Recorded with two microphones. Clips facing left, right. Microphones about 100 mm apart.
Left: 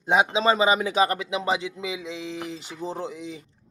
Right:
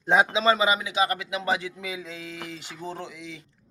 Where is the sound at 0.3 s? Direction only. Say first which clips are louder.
Left 2 dB; 25° left (ahead or behind).